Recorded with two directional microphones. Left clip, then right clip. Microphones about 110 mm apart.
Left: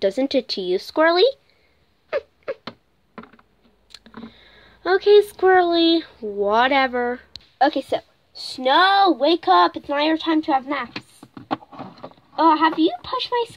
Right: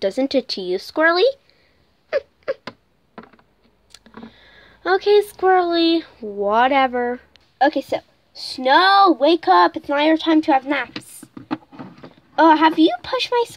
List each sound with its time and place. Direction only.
0.0 s speech: 5° right (ahead or behind)
2.4 s a sound: 15° right (ahead or behind)
3.9 s speech: 5° left (ahead or behind); by 10.9 s 60° right (ahead or behind)
12.4 s a woman's voice: 55° right (ahead or behind)